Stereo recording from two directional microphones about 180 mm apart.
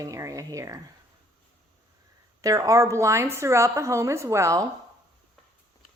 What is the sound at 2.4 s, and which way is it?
A woman's voice, 20° right (ahead or behind).